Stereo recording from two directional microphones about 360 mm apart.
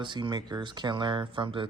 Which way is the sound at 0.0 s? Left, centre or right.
Centre.